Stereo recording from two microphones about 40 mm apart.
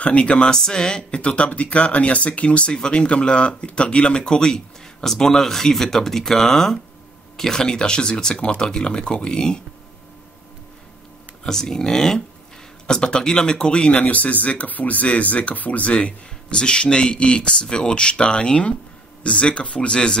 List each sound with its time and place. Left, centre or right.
0.0 s speech: left
5.0 s speech: centre
8.4 s speech: left
11.4 s speech: centre
13.9 s speech: left
15.9 s speech: left